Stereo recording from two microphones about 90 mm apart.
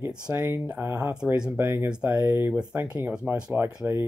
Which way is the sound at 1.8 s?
10° right (ahead or behind).